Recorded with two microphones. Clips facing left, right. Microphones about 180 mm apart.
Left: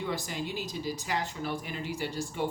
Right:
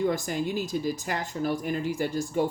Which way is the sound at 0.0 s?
45° right (ahead or behind).